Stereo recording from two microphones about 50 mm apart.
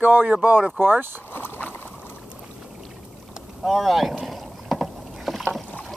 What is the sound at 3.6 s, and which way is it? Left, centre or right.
Rowboat, centre.